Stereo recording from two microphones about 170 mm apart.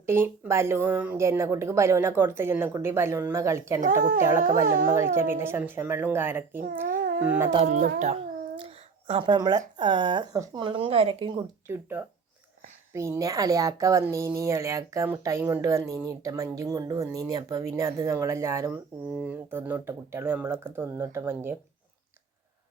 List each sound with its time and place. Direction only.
0.0 s speech: 15° right (ahead or behind)
3.8 s speech: 50° right (ahead or behind)
4.2 s speech: 15° right (ahead or behind)
6.8 s babbling: 55° right (ahead or behind)
7.3 s speech: 10° right (ahead or behind)
7.6 s a child's voice: 45° right (ahead or behind)
11.7 s speech: 10° right (ahead or behind)